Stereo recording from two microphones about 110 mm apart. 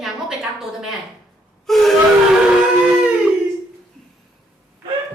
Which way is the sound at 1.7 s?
Centre (ahead or behind).